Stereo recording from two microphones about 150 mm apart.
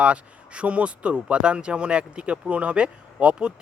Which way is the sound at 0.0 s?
5° right (ahead or behind).